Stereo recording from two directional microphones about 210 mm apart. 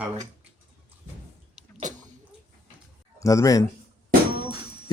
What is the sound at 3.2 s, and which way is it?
Speech, 15° left (ahead or behind).